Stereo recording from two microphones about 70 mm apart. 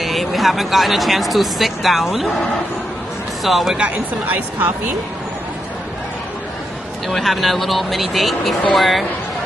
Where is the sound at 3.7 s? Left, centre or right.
Right.